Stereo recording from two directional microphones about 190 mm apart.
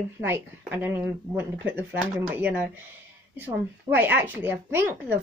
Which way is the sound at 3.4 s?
10° right (ahead or behind).